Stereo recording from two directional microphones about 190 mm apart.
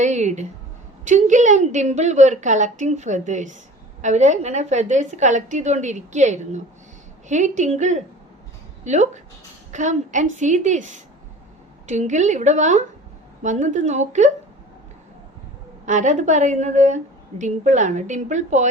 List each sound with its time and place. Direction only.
0.0 s a sound: 40° right (ahead or behind)
1.0 s a woman's voice: 40° right (ahead or behind)
15.9 s a woman's voice: 40° right (ahead or behind)